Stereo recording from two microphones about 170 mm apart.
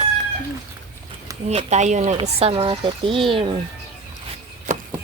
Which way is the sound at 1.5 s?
40° right (ahead or behind).